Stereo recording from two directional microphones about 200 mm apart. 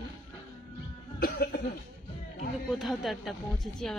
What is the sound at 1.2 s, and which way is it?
Cough, 50° left (ahead or behind).